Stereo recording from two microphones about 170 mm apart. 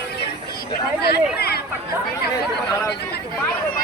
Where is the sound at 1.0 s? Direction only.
70° left (ahead or behind).